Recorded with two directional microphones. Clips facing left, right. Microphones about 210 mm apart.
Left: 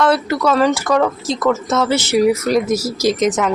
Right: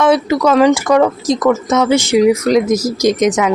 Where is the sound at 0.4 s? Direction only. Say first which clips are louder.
Right 4 dB; 15° right (ahead or behind).